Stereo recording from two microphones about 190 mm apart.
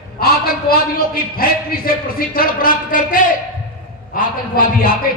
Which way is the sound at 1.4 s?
50° left (ahead or behind).